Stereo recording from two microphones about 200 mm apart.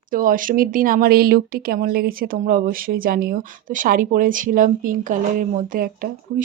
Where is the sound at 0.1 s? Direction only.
40° right (ahead or behind).